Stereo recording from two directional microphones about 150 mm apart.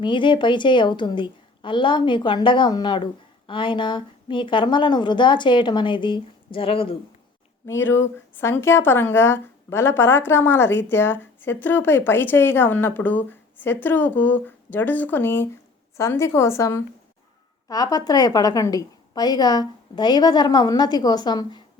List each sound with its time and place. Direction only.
0.0 s a woman's voice: 35° left (ahead or behind)
7.8 s a woman's voice: 15° left (ahead or behind)